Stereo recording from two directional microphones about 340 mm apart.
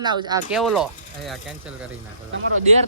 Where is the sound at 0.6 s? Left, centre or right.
Centre.